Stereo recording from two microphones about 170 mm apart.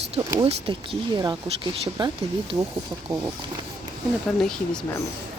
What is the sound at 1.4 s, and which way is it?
Speech, 35° right (ahead or behind).